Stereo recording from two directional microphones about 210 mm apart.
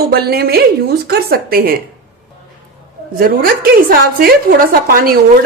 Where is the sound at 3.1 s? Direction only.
45° right (ahead or behind).